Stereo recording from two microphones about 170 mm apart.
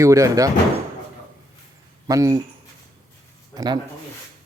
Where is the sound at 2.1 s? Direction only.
20° right (ahead or behind).